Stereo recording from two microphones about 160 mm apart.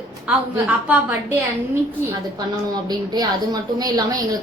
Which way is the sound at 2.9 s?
25° right (ahead or behind).